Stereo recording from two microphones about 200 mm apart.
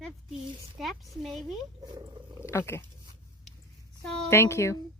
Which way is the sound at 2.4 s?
10° left (ahead or behind).